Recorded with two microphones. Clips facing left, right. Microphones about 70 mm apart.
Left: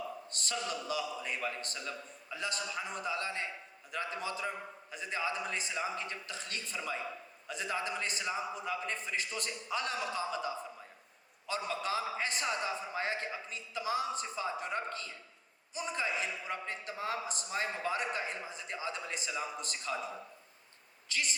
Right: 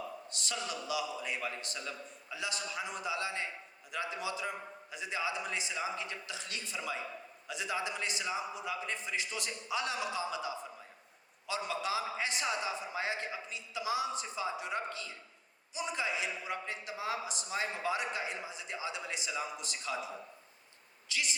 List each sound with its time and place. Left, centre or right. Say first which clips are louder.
0.3 s a man's voice: left 2 dB; left
21.1 s a man's voice: even; left